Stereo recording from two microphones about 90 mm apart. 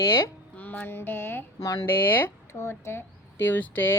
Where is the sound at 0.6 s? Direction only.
20° left (ahead or behind).